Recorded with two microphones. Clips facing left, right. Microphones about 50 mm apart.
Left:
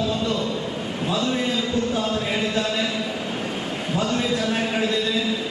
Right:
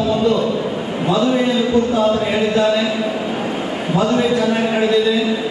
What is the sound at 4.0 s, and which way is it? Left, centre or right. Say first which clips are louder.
A man's voice: right 8 dB; centre.